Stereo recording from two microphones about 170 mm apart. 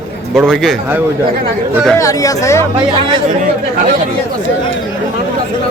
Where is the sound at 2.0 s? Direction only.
20° left (ahead or behind).